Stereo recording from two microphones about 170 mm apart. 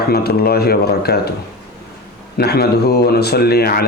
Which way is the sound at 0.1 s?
70° left (ahead or behind).